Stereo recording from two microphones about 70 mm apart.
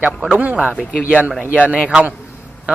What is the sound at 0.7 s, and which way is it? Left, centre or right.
Speech, centre.